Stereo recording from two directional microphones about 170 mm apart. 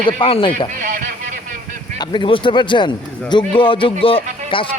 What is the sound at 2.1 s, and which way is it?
A man's voice, 30° left (ahead or behind).